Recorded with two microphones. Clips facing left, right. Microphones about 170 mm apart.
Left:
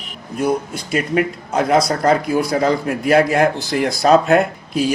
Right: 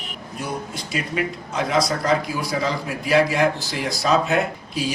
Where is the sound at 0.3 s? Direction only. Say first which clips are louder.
Left 10 dB; 50° left (ahead or behind).